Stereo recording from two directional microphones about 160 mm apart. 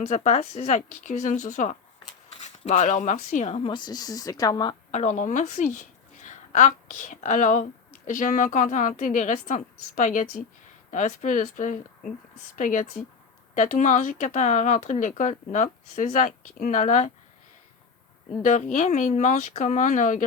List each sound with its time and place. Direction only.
0.0 s speech: 45° left (ahead or behind)
3.7 s a woman's voice: 25° left (ahead or behind)
4.9 s a woman's voice: 50° left (ahead or behind)
18.4 s speech: 50° left (ahead or behind)